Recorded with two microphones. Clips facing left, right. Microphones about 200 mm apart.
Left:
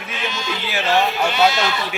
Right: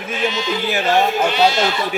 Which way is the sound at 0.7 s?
45° right (ahead or behind).